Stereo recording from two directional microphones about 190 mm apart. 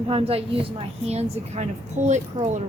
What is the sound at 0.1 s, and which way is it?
Speech, 30° right (ahead or behind).